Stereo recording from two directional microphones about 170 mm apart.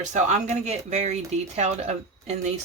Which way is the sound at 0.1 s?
45° right (ahead or behind).